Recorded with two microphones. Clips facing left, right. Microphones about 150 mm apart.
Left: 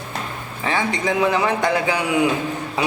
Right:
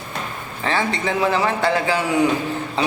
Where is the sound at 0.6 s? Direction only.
15° left (ahead or behind).